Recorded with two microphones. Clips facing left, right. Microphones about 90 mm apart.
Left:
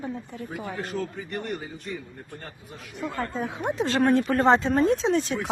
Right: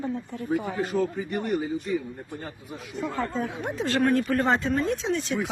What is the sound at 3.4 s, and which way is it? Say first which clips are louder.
Speech: left 2 dB; 20° left (ahead or behind).